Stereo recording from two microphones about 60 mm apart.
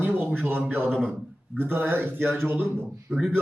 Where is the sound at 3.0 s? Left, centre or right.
Centre.